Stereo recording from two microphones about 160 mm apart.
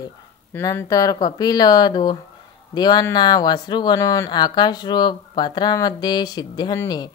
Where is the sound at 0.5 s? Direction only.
15° left (ahead or behind).